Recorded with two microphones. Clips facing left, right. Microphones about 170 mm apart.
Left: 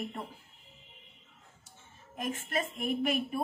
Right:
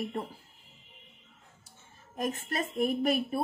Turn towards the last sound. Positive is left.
turn(degrees=-35)  # may be behind; listen again after turning